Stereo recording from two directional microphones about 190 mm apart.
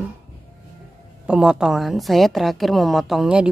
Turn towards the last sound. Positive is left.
turn(degrees=-5)  # may be behind; listen again after turning